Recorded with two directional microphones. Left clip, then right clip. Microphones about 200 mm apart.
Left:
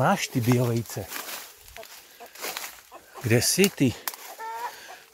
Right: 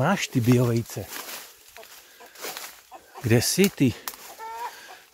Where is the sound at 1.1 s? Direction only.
55° left (ahead or behind).